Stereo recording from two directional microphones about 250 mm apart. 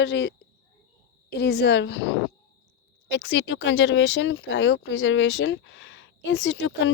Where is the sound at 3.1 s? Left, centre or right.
Left.